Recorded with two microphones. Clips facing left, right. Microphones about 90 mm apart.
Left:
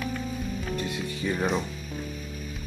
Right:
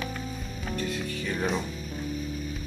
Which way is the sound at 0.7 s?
15° left (ahead or behind).